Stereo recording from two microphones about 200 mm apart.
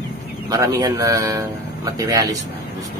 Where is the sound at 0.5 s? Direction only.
15° right (ahead or behind).